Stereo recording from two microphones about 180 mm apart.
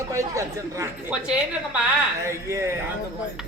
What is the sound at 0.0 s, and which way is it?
Speech, 15° right (ahead or behind).